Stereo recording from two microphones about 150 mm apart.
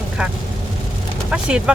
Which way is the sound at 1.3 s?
5° right (ahead or behind).